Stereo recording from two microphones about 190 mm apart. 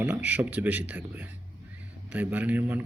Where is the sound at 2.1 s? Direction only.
10° right (ahead or behind).